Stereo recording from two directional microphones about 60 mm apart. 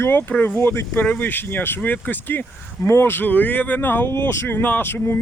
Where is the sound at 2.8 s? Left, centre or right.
Left.